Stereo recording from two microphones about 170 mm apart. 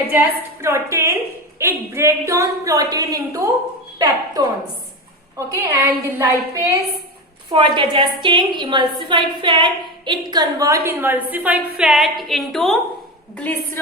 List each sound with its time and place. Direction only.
0.1 s a woman's voice: 15° right (ahead or behind)
3.9 s a sound: 25° right (ahead or behind)
5.5 s a woman's voice: 15° right (ahead or behind)
7.5 s a woman's voice: 30° right (ahead or behind); by 13.7 s 10° left (ahead or behind)